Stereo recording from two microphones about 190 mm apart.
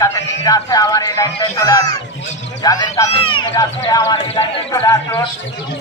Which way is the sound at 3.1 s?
30° left (ahead or behind).